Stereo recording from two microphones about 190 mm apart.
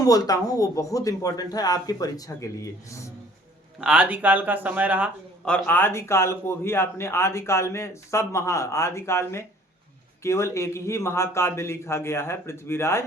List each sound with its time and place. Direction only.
0.0 s speech: 20° left (ahead or behind)
3.8 s speech: 5° right (ahead or behind)
5.5 s speech: 5° left (ahead or behind)